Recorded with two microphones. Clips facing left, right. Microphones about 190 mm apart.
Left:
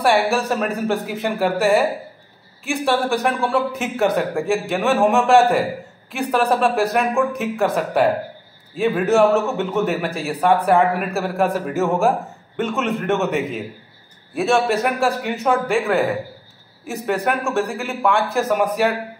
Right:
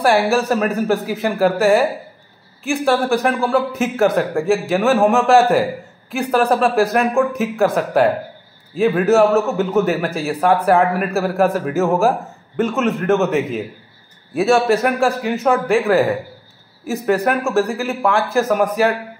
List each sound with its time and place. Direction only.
0.0 s a man's voice: centre (ahead or behind)